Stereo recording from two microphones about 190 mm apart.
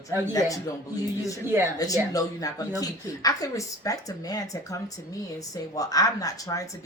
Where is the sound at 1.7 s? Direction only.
20° left (ahead or behind).